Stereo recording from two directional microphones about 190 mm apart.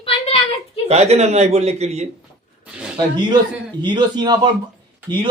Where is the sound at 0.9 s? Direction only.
35° right (ahead or behind).